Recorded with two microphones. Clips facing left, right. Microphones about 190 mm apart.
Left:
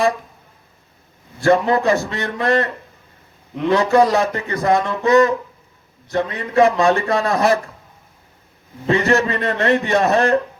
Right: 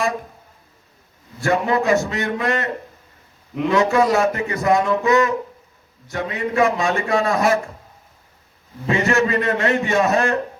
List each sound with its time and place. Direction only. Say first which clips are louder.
1.4 s a man's voice: left 4 dB; 35° left (ahead or behind)
3.7 s a man's voice: left 2 dB; 35° left (ahead or behind)
8.9 s a man's voice: left 2 dB; 35° left (ahead or behind)